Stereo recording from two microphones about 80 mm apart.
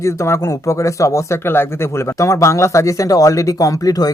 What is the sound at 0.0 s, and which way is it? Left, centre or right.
Speech, left.